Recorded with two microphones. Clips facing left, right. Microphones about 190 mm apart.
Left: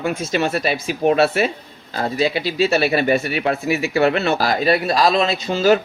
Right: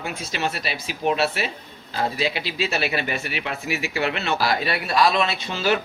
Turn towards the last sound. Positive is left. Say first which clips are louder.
# left 8 dB
turn(degrees=40)  # may be behind; listen again after turning